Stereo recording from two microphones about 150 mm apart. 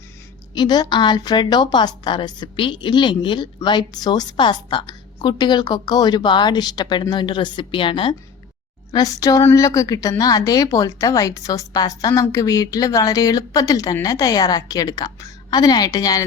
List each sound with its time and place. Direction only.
0.5 s a woman's voice: 30° left (ahead or behind)
8.9 s a woman's voice: 25° left (ahead or behind)